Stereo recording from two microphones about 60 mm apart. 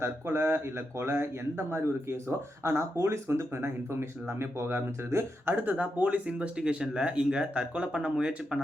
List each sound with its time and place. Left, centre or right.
0.0 s speech: right; by 8.6 s centre